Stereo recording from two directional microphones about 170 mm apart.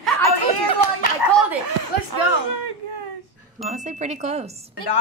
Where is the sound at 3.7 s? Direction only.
45° right (ahead or behind).